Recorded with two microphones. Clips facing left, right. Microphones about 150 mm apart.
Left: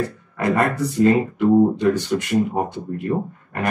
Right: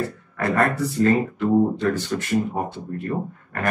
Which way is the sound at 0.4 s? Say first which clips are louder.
Left 2 dB; 20° left (ahead or behind).